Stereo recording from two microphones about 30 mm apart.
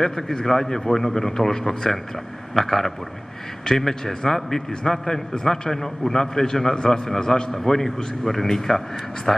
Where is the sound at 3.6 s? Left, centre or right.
Centre.